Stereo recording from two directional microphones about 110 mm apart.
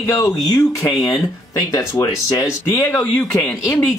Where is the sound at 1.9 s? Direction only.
35° left (ahead or behind).